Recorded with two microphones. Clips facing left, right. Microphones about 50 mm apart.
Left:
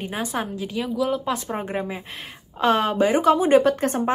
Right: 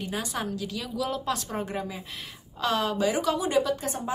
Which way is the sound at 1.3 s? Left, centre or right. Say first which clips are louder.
Left 4 dB; left.